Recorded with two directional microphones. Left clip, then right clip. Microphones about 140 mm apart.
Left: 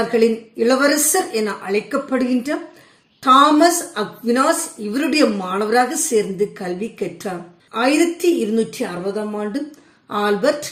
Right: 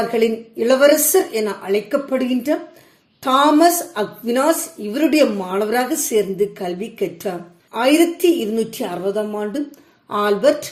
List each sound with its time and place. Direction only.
0.1 s a woman's voice: 40° right (ahead or behind)
10.1 s a woman's voice: 35° right (ahead or behind)